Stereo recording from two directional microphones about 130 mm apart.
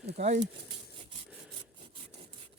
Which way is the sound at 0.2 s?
65° right (ahead or behind).